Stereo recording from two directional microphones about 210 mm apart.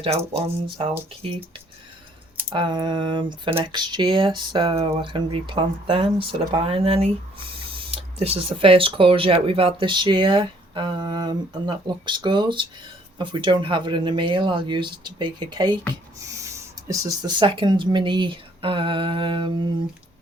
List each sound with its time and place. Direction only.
2.5 s speech: 20° right (ahead or behind)